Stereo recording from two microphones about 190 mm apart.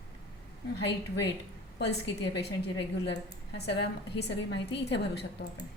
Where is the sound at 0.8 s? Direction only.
65° left (ahead or behind).